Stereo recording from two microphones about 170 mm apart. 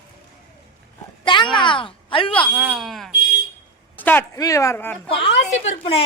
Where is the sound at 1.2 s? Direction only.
30° left (ahead or behind).